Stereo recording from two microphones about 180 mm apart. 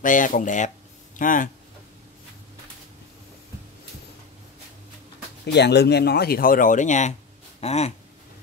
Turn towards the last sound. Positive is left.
turn(degrees=35)  # may be behind; listen again after turning